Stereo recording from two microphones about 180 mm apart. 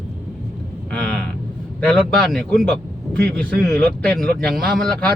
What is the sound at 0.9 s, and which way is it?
Vehicle, 5° left (ahead or behind).